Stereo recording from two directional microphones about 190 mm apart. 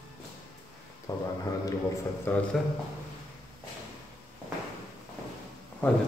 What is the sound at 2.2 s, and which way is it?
Speech, 10° left (ahead or behind).